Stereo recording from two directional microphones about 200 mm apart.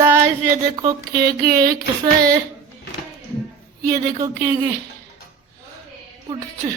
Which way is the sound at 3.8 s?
15° right (ahead or behind).